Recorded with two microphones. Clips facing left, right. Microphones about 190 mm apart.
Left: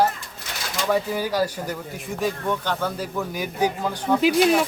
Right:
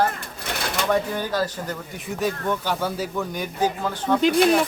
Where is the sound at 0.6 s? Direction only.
60° right (ahead or behind).